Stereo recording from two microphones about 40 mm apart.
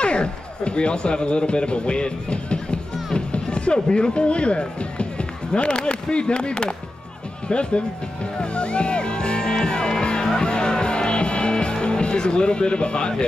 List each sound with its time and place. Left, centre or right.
0.0 s speech: left
8.4 s music: left